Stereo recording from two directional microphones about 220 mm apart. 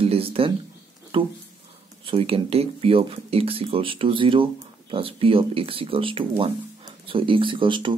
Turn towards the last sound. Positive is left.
turn(degrees=-20)  # may be behind; listen again after turning